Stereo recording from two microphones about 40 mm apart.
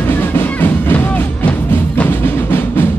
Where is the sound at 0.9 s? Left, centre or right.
Left.